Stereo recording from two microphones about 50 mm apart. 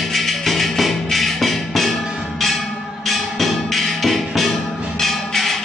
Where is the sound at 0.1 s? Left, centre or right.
Centre.